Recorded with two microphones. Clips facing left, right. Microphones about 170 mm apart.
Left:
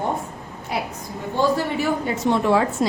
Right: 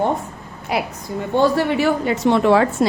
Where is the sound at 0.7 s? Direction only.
90° right.